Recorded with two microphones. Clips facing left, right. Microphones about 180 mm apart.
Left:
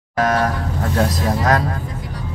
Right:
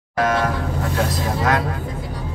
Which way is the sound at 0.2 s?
40° left (ahead or behind).